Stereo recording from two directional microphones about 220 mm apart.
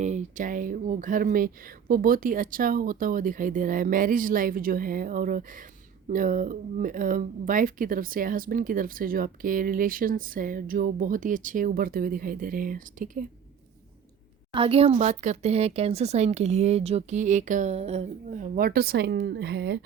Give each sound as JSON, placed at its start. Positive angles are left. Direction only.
{"t": 0.0, "sound": "speech", "side_deg": -30}
{"t": 14.5, "sound": "speech", "side_deg": -25}